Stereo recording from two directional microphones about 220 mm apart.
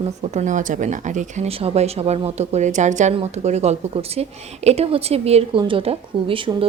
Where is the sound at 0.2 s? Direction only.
30° right (ahead or behind).